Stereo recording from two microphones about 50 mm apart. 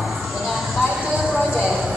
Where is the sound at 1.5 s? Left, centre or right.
Centre.